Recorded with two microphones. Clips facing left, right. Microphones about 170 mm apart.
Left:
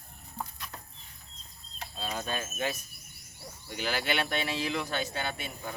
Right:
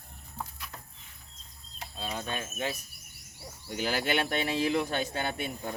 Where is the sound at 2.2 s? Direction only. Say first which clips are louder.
Left 1 dB; 25° right (ahead or behind).